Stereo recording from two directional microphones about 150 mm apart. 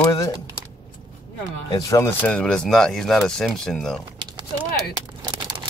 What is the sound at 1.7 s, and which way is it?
Speech, 25° left (ahead or behind).